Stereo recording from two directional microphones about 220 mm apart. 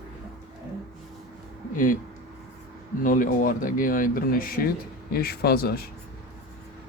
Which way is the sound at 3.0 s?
40° left (ahead or behind).